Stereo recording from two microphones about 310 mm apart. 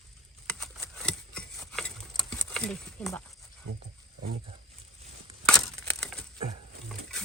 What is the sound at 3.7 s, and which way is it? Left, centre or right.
Speech, right.